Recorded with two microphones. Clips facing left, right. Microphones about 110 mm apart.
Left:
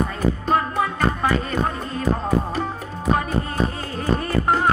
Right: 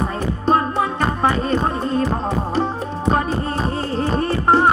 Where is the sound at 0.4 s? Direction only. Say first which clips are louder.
Right 6 dB; 30° right (ahead or behind).